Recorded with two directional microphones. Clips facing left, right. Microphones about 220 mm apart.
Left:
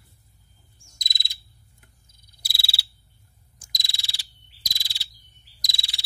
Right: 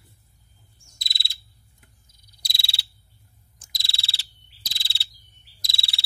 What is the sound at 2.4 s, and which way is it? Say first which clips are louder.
Frog: left 1 dB; 5° left (ahead or behind).